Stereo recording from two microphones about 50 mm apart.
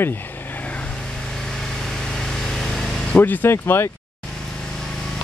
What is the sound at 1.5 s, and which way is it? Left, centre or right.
Vehicle, centre.